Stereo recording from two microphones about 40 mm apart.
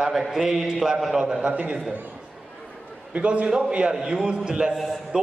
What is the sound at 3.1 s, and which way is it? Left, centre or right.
Speech, right.